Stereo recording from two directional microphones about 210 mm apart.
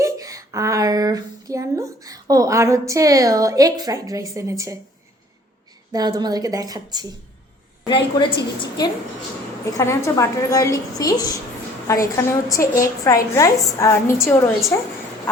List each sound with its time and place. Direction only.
0.0 s a woman's voice: 15° right (ahead or behind)
5.9 s a woman's voice: 20° right (ahead or behind)
7.9 s a woman's voice: 20° left (ahead or behind)